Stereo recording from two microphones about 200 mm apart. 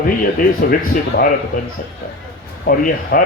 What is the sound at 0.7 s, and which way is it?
Speech, 45° left (ahead or behind).